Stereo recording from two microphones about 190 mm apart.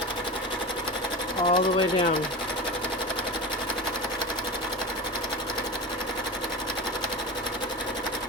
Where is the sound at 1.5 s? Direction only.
25° left (ahead or behind).